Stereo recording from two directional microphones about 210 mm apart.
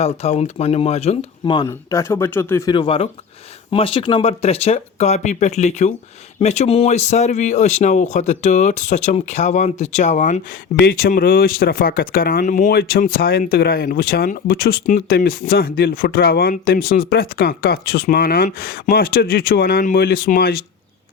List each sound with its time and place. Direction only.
0.0 s speech: 30° left (ahead or behind)